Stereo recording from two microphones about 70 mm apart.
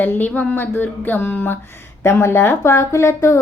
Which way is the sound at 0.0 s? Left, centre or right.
Left.